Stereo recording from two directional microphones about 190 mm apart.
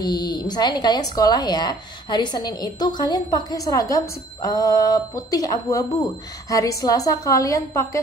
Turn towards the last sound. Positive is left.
turn(degrees=15)  # may be behind; listen again after turning